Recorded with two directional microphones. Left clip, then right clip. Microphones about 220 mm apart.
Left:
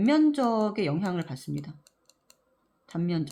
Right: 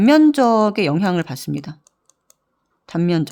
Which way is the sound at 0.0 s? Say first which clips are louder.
Right 11 dB; 45° right (ahead or behind).